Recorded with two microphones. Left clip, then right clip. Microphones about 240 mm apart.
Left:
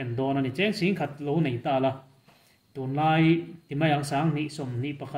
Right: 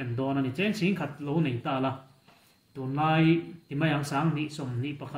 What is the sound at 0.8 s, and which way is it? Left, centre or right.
Speech, left.